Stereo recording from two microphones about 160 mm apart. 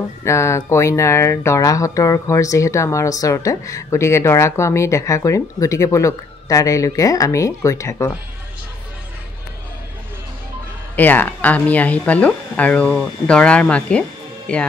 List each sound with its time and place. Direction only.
0.2 s speech: 15° left (ahead or behind)
11.0 s speech: 10° left (ahead or behind)